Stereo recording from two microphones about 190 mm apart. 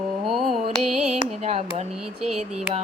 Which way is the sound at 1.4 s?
35° right (ahead or behind).